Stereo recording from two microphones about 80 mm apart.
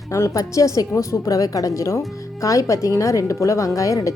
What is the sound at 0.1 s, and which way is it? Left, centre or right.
A woman's voice, left.